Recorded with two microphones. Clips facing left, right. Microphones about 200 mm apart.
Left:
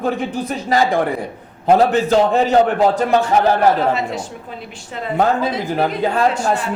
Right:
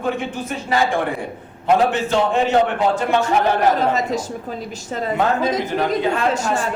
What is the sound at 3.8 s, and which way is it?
Speech, 40° right (ahead or behind).